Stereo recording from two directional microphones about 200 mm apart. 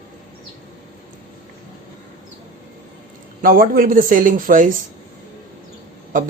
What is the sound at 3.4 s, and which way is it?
Speech, 45° right (ahead or behind).